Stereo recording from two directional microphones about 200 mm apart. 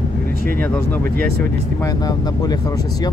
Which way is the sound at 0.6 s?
10° left (ahead or behind).